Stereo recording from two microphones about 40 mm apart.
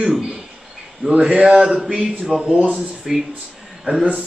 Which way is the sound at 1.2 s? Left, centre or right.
Right.